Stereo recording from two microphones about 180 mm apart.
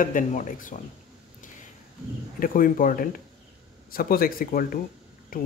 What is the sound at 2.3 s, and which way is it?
Speech, 50° left (ahead or behind).